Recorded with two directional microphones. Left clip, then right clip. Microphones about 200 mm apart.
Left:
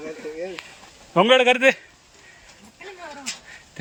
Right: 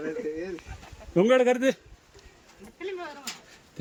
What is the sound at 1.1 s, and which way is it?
Speech, centre (ahead or behind).